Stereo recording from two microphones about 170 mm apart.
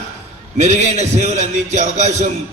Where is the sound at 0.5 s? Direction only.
40° right (ahead or behind).